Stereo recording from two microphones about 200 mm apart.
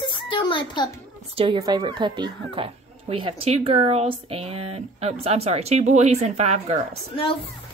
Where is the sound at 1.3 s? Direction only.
25° right (ahead or behind).